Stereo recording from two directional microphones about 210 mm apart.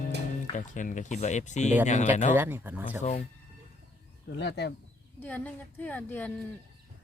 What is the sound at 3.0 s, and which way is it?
Speech, 35° left (ahead or behind).